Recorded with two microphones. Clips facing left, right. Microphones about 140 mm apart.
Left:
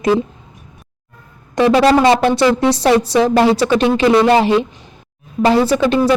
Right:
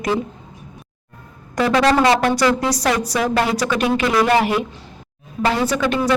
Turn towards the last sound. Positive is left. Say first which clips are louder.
# left 5 dB
turn(degrees=30)  # may be behind; listen again after turning